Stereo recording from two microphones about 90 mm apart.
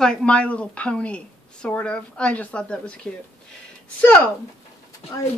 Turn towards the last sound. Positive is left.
turn(degrees=90)